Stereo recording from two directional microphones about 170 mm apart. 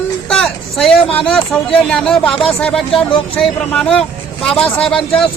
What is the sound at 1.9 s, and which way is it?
Speech, 5° left (ahead or behind).